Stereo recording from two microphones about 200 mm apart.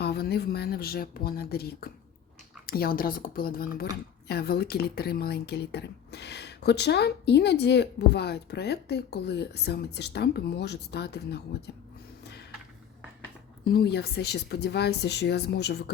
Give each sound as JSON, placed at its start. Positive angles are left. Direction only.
{"t": 0.0, "sound": "speech", "side_deg": 55}
{"t": 13.7, "sound": "speech", "side_deg": 50}